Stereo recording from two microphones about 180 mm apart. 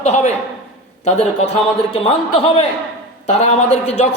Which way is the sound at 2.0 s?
30° left (ahead or behind).